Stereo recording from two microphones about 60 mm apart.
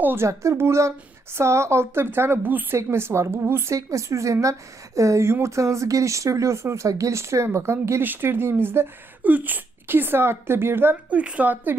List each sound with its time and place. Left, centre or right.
0.0 s speech: right
0.3 s a woman's voice: right
2.7 s a woman's voice: right
3.7 s speech: right
8.0 s speech: right
9.2 s speech: right
11.1 s a woman's voice: right